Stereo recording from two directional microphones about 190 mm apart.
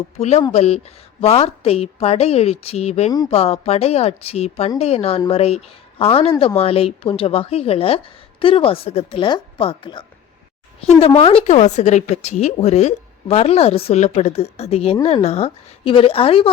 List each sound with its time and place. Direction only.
0.2 s a woman's voice: 35° left (ahead or behind)